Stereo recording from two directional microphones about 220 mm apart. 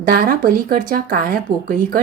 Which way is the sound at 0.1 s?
40° right (ahead or behind).